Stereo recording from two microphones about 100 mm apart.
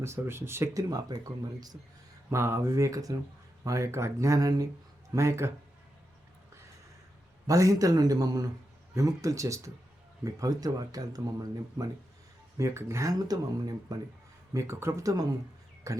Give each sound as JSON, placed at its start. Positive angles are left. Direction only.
{"t": 0.0, "sound": "speech", "side_deg": -25}
{"t": 2.3, "sound": "speech", "side_deg": -25}
{"t": 7.4, "sound": "speech", "side_deg": -35}
{"t": 14.5, "sound": "speech", "side_deg": -30}